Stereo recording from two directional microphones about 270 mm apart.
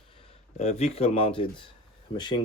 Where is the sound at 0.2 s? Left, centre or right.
Left.